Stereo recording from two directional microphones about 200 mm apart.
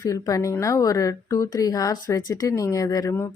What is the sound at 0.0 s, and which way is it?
A woman's voice, 15° left (ahead or behind).